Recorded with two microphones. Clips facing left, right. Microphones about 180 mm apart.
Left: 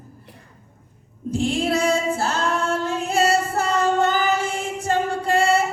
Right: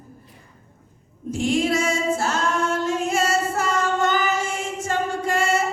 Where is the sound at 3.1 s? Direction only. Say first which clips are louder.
Left 2 dB; 35° left (ahead or behind).